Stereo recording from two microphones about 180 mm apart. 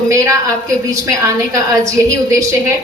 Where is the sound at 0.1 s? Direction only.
15° right (ahead or behind).